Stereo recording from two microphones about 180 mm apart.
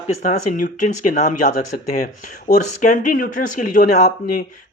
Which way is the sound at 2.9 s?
50° left (ahead or behind).